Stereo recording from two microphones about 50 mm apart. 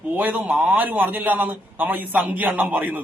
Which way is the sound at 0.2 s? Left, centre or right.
Right.